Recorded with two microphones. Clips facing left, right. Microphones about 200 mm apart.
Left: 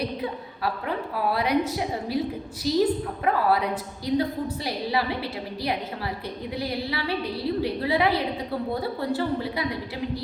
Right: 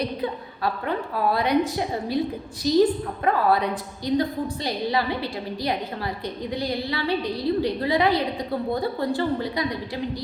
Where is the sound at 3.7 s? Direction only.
5° left (ahead or behind).